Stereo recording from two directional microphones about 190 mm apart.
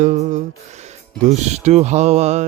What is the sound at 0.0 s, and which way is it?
Music, 40° right (ahead or behind).